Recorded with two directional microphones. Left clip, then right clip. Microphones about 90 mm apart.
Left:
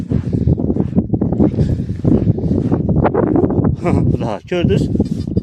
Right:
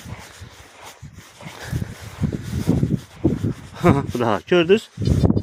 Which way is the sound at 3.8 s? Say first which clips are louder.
Even; 45° left (ahead or behind).